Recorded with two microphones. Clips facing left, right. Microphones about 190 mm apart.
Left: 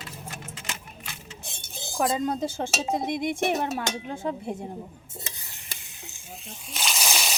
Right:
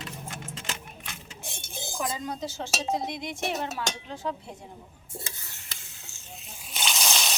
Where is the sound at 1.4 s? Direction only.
15° right (ahead or behind).